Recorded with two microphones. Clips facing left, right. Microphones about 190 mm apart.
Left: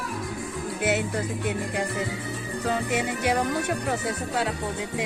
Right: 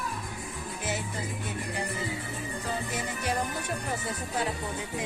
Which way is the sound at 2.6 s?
75° left (ahead or behind).